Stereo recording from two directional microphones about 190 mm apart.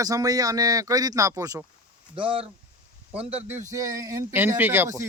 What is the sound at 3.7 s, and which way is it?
Speech, 20° right (ahead or behind).